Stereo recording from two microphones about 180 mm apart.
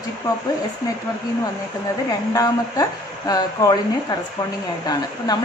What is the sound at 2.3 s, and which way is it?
A woman's voice, 20° left (ahead or behind).